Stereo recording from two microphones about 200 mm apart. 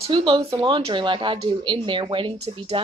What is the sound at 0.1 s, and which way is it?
Speech, 25° right (ahead or behind).